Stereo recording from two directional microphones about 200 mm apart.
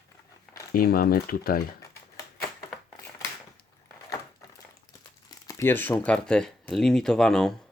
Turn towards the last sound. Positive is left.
turn(degrees=0)  # may be behind; listen again after turning